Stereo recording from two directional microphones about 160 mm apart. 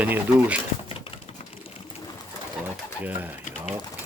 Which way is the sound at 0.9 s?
35° left (ahead or behind).